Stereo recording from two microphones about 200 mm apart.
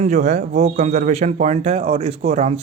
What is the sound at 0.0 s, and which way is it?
A man's voice, 35° right (ahead or behind).